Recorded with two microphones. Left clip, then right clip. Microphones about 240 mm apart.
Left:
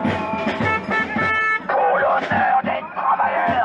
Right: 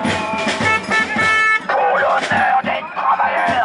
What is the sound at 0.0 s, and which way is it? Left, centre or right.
Music, centre.